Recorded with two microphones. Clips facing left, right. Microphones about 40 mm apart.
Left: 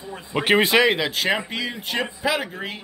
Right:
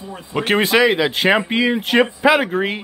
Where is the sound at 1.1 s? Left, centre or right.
Right.